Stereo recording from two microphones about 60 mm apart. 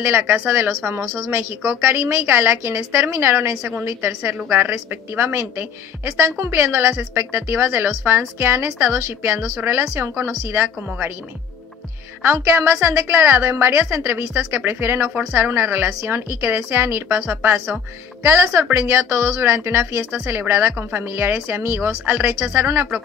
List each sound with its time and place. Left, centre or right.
0.0 s a woman's voice: right
1.6 s a woman's voice: right
2.0 s a woman's voice: right
12.2 s speech: right
14.5 s a woman's voice: right